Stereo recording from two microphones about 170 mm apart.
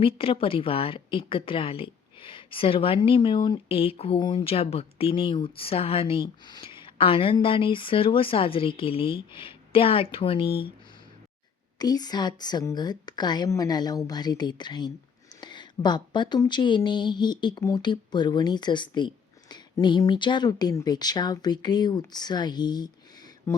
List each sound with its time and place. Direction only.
0.0 s speech: 35° left (ahead or behind)
11.8 s speech: 25° left (ahead or behind)